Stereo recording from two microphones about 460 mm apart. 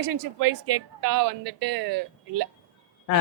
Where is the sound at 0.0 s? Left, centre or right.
Right.